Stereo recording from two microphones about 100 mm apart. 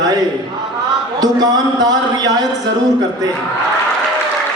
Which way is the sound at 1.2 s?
40° right (ahead or behind).